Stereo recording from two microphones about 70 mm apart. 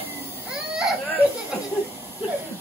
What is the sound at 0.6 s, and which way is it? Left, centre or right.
Baby cry, centre.